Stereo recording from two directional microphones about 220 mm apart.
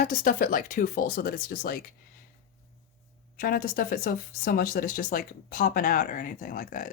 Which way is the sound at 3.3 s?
40° left (ahead or behind).